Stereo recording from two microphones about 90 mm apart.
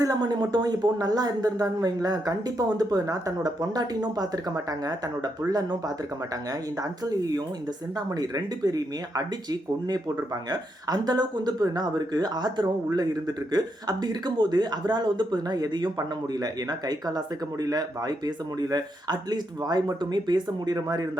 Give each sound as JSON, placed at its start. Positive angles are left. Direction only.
{"t": 0.0, "sound": "speech", "side_deg": -45}
{"t": 7.0, "sound": "speech", "side_deg": -45}